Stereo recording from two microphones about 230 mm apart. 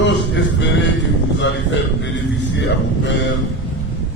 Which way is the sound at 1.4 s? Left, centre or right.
Left.